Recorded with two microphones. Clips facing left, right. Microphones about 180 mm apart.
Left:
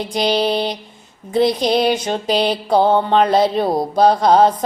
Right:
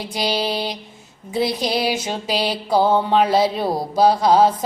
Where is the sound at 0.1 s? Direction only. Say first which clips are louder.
Left 5 dB; 5° right (ahead or behind).